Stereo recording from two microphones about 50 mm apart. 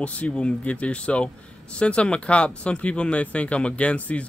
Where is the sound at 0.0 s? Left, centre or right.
Left.